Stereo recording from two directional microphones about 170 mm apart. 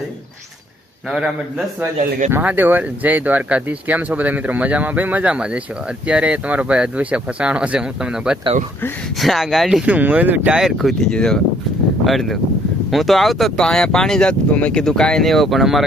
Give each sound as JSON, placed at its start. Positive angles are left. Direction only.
{"t": 1.1, "sound": "speech", "side_deg": -5}
{"t": 2.0, "sound": "speech", "side_deg": -50}
{"t": 2.3, "sound": "speech", "side_deg": -10}